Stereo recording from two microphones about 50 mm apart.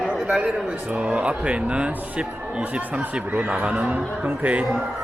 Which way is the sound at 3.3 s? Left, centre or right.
Right.